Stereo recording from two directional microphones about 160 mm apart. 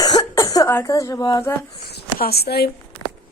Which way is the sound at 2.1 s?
75° left (ahead or behind).